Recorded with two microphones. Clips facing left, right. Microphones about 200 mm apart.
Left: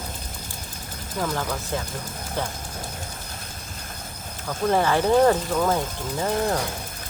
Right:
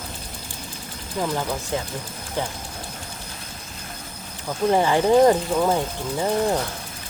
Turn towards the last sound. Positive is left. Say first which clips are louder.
# right 2 dB
turn(degrees=-15)  # may be behind; listen again after turning